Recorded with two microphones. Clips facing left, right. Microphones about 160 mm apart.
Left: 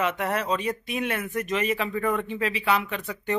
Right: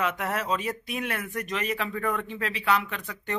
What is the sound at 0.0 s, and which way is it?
Speech, centre (ahead or behind).